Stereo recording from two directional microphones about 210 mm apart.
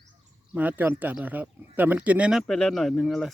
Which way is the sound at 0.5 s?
10° right (ahead or behind).